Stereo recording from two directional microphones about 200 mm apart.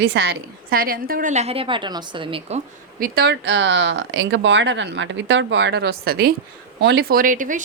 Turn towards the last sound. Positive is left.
turn(degrees=-40)  # may be behind; listen again after turning